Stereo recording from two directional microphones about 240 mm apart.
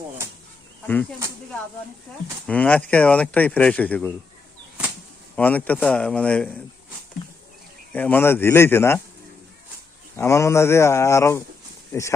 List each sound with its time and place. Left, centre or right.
2.5 s speech: centre
5.4 s speech: centre
7.2 s a sound: left
7.9 s speech: centre
10.2 s speech: centre